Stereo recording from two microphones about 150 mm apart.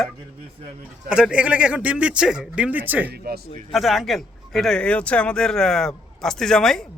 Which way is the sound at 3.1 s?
90° right.